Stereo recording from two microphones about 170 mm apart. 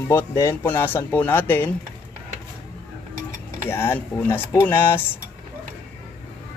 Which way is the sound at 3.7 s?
15° left (ahead or behind).